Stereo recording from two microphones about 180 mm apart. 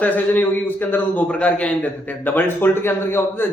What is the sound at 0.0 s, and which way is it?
A man's voice, 10° left (ahead or behind).